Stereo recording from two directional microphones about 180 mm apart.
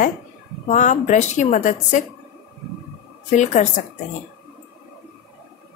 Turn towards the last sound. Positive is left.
turn(degrees=40)  # may be behind; listen again after turning